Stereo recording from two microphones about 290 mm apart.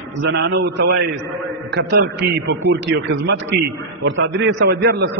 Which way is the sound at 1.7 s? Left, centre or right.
Right.